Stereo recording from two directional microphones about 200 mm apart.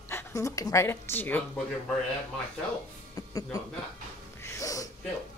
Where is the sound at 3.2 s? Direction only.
20° left (ahead or behind).